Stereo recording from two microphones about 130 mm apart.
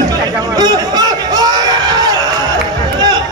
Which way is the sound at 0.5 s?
30° right (ahead or behind).